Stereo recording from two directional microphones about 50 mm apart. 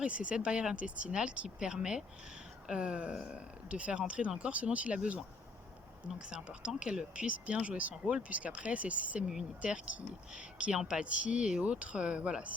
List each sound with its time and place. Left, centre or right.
0.0 s speech: right